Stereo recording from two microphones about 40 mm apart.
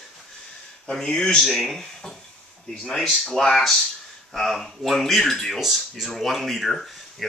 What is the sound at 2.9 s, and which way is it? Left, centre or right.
Speech, centre.